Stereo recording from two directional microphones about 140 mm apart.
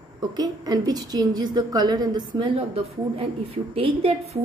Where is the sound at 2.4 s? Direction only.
40° right (ahead or behind).